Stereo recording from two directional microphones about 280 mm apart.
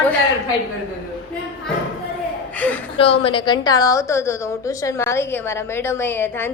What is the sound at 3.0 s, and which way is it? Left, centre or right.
A woman's voice, centre.